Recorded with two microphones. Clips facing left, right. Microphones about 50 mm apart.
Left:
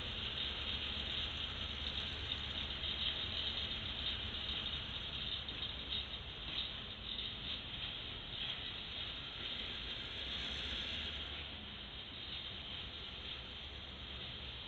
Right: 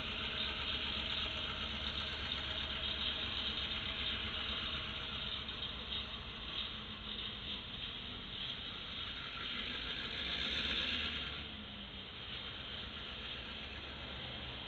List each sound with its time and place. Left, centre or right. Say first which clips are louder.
0.0 s vehicle: right 3 dB; right
10.0 s vehicle: right 4 dB; right